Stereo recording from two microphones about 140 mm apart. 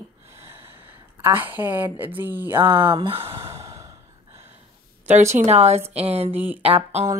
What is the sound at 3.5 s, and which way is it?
Sigh, 25° right (ahead or behind).